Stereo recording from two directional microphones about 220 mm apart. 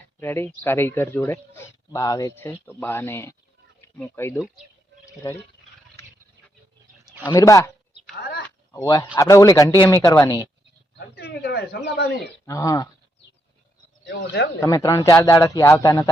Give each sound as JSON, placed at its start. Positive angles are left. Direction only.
{"t": 0.2, "sound": "speech", "side_deg": 10}
{"t": 7.3, "sound": "speech", "side_deg": 15}
{"t": 8.2, "sound": "a sound", "side_deg": 50}
{"t": 8.7, "sound": "speech", "side_deg": 15}
{"t": 10.9, "sound": "speech", "side_deg": 45}
{"t": 12.5, "sound": "speech", "side_deg": 15}
{"t": 14.0, "sound": "speech", "side_deg": 55}
{"t": 14.6, "sound": "speech", "side_deg": 15}